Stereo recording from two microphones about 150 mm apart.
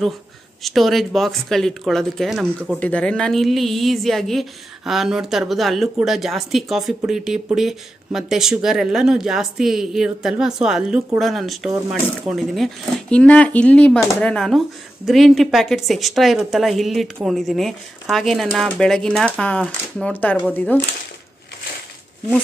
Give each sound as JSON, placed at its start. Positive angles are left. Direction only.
{"t": 0.6, "sound": "a woman's voice", "side_deg": 0}
{"t": 2.8, "sound": "a woman's voice", "side_deg": 10}